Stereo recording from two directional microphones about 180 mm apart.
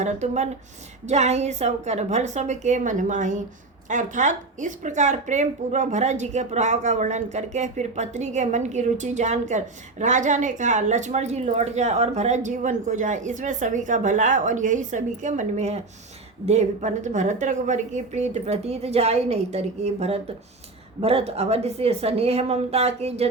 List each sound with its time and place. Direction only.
0.0 s a woman's voice: 40° right (ahead or behind)